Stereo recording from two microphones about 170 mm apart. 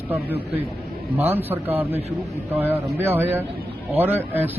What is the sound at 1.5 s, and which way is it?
Speech, 10° right (ahead or behind).